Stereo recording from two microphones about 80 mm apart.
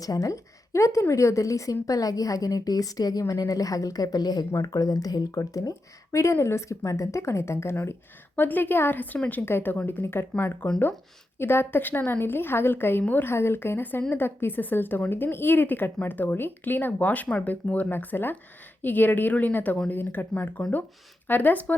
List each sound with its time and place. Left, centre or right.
0.0 s a woman's voice: left
8.4 s a woman's voice: left
9.1 s speech: centre
9.5 s a woman's voice: left